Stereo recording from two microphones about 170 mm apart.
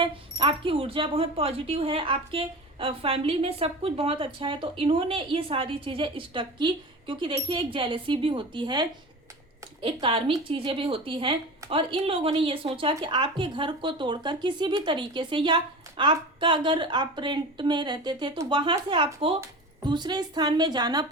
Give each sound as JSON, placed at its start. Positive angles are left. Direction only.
{"t": 0.0, "sound": "speech", "side_deg": -30}